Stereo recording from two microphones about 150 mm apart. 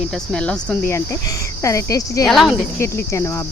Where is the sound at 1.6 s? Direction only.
20° left (ahead or behind).